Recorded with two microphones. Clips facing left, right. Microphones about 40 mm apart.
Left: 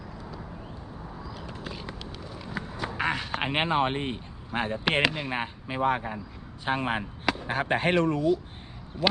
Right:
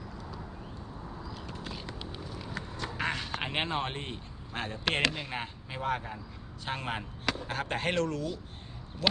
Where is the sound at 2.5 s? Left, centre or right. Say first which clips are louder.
Left 6 dB; centre.